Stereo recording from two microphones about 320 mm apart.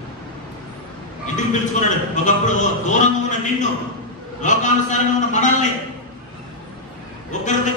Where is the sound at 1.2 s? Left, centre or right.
Left.